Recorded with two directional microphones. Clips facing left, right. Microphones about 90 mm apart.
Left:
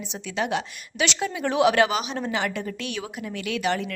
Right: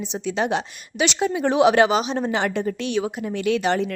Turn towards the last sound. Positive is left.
turn(degrees=-30)  # may be behind; listen again after turning